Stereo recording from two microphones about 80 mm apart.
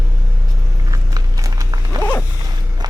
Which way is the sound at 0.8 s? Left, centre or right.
Right.